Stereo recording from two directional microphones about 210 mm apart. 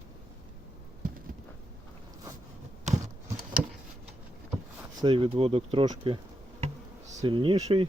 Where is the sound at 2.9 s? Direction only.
35° right (ahead or behind).